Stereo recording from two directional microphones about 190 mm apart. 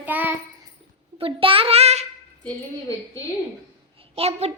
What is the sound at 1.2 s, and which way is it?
Speech, 30° right (ahead or behind).